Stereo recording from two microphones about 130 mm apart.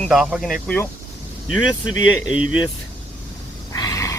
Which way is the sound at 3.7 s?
25° left (ahead or behind).